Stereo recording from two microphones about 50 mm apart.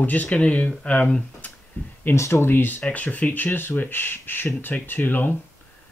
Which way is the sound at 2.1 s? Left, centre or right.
Left.